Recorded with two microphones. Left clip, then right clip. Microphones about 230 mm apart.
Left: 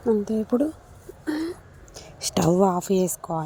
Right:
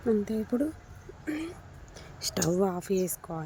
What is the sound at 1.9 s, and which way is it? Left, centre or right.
Speech, centre.